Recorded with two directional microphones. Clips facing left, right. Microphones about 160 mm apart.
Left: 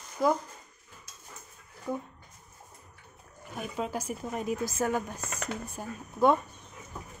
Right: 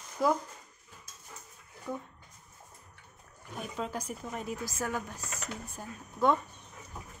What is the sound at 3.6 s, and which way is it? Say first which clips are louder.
Speech: left 3 dB; 10° left (ahead or behind).